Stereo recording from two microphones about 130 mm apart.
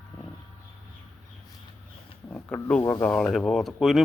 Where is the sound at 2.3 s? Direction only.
10° left (ahead or behind).